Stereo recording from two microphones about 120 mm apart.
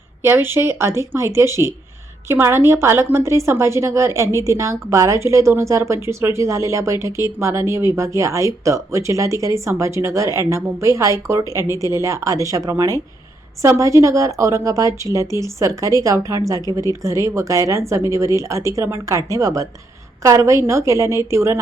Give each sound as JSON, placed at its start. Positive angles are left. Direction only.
{"t": 0.2, "sound": "a woman's voice", "side_deg": -20}